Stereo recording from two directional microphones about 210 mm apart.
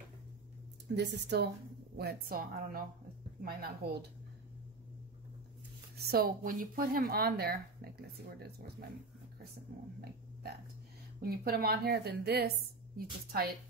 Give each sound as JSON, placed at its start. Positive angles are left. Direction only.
{"t": 0.9, "sound": "a woman's voice", "side_deg": -50}
{"t": 5.9, "sound": "a woman's voice", "side_deg": -50}
{"t": 11.1, "sound": "a woman's voice", "side_deg": -45}